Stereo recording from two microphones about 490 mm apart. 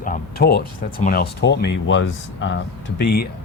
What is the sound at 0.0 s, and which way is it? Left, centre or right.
Speech, centre.